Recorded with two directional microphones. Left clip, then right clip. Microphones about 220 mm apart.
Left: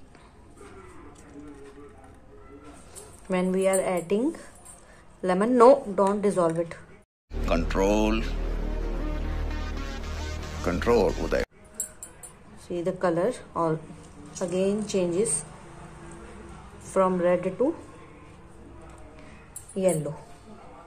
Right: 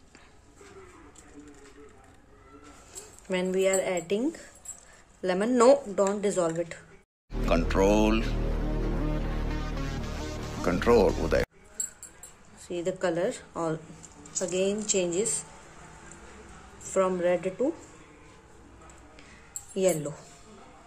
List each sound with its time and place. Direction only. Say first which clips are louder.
3.3 s speech: left 2 dB; 5° right (ahead or behind)
7.3 s music: right 1 dB; centre (ahead or behind)
12.6 s speech: left 3 dB; 5° right (ahead or behind)
16.8 s speech: left 3 dB; 5° right (ahead or behind)
19.7 s speech: left 1 dB; 15° right (ahead or behind)